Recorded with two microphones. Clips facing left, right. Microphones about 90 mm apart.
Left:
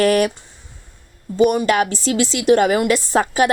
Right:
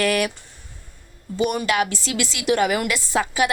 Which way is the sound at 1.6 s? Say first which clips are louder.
Left 5 dB; 40° left (ahead or behind).